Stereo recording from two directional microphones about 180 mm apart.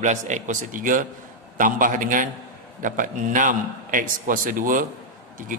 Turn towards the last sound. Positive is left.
turn(degrees=-50)  # may be behind; listen again after turning